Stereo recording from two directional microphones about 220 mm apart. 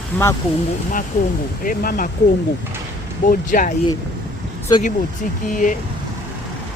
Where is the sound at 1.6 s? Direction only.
40° left (ahead or behind).